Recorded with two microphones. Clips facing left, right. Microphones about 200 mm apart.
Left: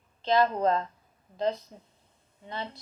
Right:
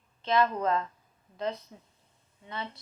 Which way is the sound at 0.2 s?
35° left (ahead or behind).